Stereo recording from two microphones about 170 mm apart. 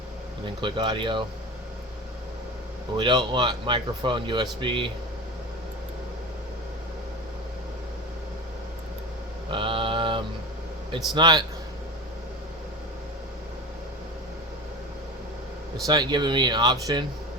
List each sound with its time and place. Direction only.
0.6 s speech: 25° right (ahead or behind)
3.0 s speech: 25° right (ahead or behind)
9.5 s mantra: 30° right (ahead or behind)
10.9 s speech: 25° right (ahead or behind)
15.9 s speech: 25° right (ahead or behind)